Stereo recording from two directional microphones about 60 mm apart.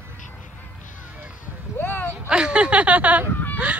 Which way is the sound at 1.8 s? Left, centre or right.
Left.